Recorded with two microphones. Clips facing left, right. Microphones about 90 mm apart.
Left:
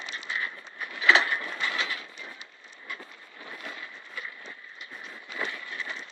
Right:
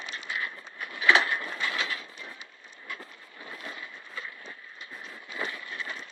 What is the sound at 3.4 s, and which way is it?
Vehicle, centre (ahead or behind).